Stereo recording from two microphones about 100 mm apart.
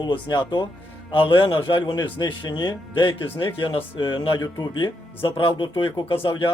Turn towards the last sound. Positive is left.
turn(degrees=55)  # may be behind; listen again after turning